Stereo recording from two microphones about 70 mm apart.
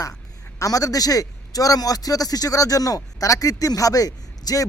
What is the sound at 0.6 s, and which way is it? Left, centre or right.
A man's voice, left.